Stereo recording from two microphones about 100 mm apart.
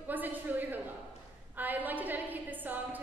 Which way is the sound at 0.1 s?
20° right (ahead or behind).